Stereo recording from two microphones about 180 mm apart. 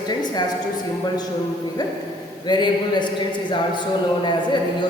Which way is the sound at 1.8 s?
20° left (ahead or behind).